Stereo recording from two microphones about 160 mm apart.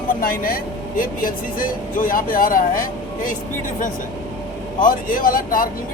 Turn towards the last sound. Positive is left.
turn(degrees=60)  # may be behind; listen again after turning